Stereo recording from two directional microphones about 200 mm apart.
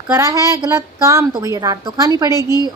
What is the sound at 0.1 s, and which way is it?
Speech, 15° right (ahead or behind).